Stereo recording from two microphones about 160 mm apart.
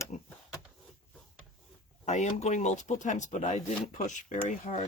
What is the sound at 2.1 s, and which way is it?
Speech, 45° left (ahead or behind).